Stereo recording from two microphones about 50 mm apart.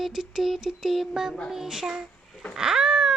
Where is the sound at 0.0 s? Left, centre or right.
Centre.